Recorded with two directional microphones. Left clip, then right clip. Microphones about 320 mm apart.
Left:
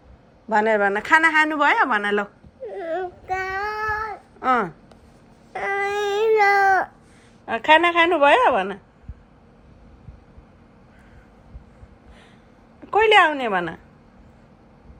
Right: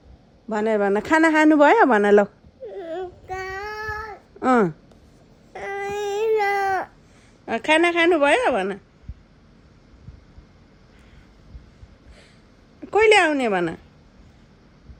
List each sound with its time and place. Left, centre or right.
0.4 s speech: centre
2.6 s baby cry: centre
3.7 s babbling: centre
4.4 s a sound: centre
5.5 s cat: centre
7.4 s a woman's voice: centre
12.9 s speech: centre